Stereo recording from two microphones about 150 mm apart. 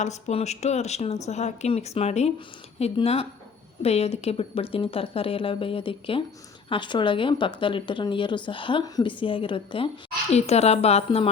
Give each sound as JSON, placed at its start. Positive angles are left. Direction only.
{"t": 0.0, "sound": "a woman's voice", "side_deg": 50}